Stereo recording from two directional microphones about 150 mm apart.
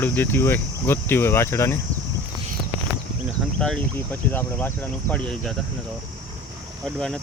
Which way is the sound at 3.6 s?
10° left (ahead or behind).